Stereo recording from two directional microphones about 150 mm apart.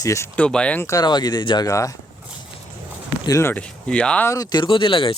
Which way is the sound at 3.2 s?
20° left (ahead or behind).